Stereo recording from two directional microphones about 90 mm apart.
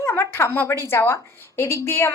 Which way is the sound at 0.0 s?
25° left (ahead or behind).